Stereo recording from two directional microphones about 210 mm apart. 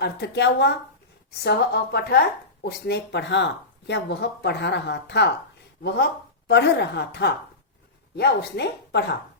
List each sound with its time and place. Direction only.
0.0 s speech: 55° left (ahead or behind)
6.5 s speech: 55° left (ahead or behind)